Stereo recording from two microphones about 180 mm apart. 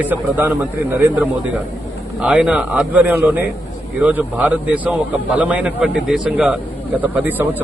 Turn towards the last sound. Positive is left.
turn(degrees=-10)  # may be behind; listen again after turning